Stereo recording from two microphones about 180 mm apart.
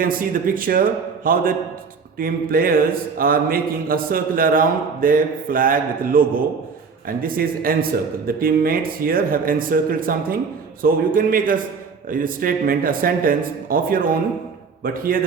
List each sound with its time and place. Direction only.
0.0 s speech: 50° right (ahead or behind)